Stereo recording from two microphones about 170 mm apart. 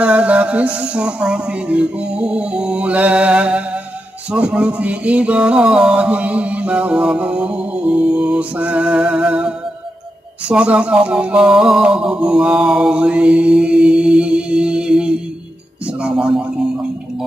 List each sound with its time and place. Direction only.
0.0 s music: 5° right (ahead or behind)
10.5 s music: 5° right (ahead or behind)
16.0 s speech: 5° right (ahead or behind)